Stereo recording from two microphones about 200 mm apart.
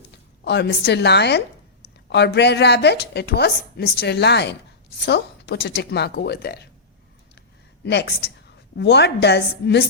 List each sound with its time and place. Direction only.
0.4 s a woman's voice: 55° left (ahead or behind)
7.9 s a woman's voice: 55° left (ahead or behind)